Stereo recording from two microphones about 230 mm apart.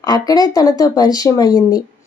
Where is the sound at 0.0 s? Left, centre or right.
Centre.